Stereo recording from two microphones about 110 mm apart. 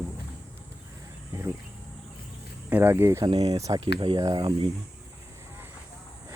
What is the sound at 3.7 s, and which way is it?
Speech, 50° right (ahead or behind).